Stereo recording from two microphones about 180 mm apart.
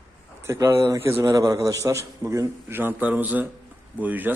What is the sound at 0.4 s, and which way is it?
A man's voice, 15° right (ahead or behind).